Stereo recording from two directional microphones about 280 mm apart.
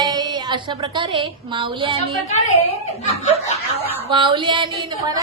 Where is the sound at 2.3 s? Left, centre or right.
Left.